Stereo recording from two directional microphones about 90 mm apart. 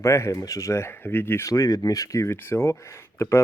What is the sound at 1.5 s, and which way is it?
Speech, 40° left (ahead or behind).